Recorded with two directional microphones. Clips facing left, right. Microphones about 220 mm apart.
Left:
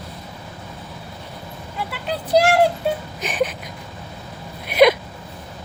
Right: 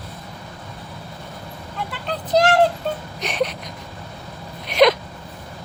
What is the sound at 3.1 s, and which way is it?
Whimper, centre (ahead or behind).